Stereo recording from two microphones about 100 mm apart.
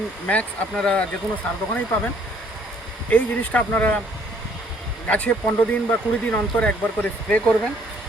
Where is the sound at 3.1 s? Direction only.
15° left (ahead or behind).